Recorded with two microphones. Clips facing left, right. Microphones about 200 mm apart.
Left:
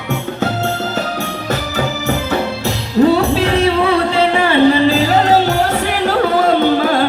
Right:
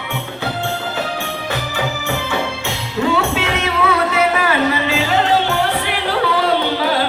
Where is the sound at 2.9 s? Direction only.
35° left (ahead or behind).